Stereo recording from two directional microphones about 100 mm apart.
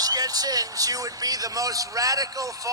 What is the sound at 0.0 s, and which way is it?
Speech, 40° right (ahead or behind).